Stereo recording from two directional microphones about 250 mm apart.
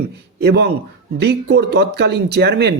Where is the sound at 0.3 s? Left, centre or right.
Right.